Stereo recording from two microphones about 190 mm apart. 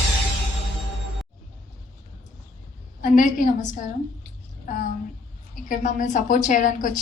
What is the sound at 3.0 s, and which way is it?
Speech, 45° left (ahead or behind).